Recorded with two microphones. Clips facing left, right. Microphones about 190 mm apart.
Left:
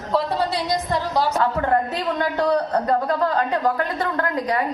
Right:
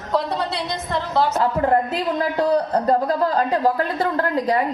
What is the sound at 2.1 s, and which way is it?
A man's voice, 30° right (ahead or behind).